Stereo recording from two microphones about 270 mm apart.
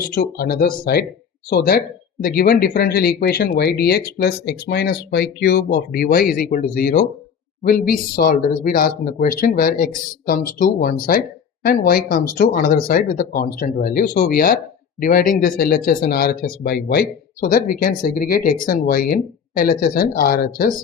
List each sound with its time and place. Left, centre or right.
0.0 s speech: left